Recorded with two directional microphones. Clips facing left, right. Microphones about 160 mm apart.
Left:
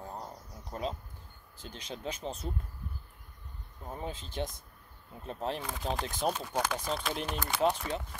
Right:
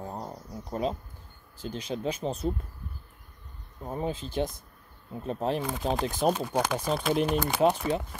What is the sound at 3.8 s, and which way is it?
Speech, 25° right (ahead or behind).